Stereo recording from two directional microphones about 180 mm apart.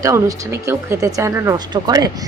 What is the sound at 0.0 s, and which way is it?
A woman's voice, 20° right (ahead or behind).